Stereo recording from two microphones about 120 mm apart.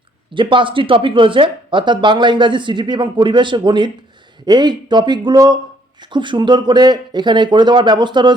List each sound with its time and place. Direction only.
0.3 s speech: 45° right (ahead or behind)